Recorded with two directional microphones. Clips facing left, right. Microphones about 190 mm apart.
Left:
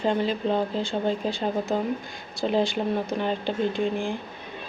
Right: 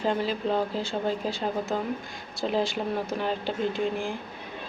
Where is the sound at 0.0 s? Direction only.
5° right (ahead or behind).